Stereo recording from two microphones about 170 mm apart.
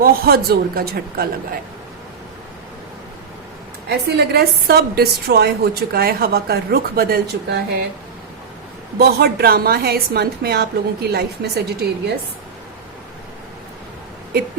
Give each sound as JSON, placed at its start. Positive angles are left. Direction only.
{"t": 0.0, "sound": "a woman's voice", "side_deg": -60}
{"t": 3.8, "sound": "a woman's voice", "side_deg": -70}
{"t": 9.0, "sound": "a woman's voice", "side_deg": -65}